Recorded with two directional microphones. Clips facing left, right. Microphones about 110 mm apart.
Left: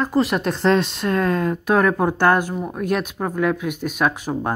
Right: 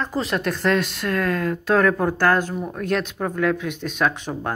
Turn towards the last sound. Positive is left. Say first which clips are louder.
# left 2 dB
turn(degrees=10)  # may be behind; listen again after turning